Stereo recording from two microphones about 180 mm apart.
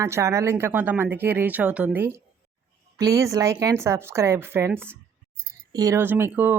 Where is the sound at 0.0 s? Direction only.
15° right (ahead or behind).